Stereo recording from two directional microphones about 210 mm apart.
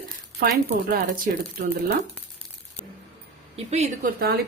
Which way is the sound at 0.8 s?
45° right (ahead or behind).